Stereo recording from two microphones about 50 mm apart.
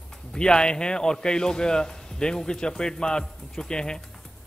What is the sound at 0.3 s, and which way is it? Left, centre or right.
A man's voice, centre.